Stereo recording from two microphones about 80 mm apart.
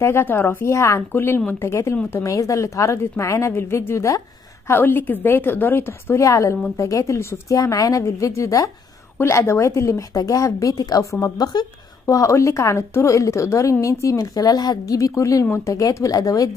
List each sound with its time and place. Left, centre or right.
0.0 s a woman's voice: left
0.7 s a woman's voice: left
6.1 s a woman's voice: left